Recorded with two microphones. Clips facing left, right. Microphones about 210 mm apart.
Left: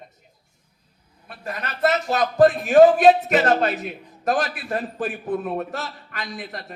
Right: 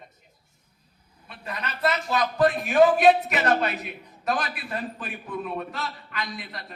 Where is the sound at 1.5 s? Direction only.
45° left (ahead or behind).